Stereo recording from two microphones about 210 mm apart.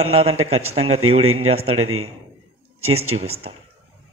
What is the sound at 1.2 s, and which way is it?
Speech, 80° right.